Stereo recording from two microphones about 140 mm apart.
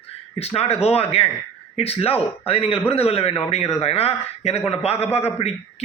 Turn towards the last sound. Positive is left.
turn(degrees=50)  # may be behind; listen again after turning